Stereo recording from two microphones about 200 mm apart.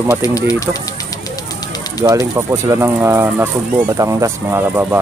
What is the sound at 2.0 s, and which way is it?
Speech, 15° right (ahead or behind).